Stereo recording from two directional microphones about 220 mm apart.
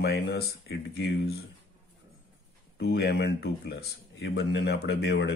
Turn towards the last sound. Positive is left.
turn(degrees=50)  # may be behind; listen again after turning